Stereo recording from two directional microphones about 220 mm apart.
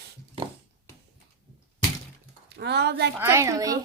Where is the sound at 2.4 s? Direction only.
50° right (ahead or behind).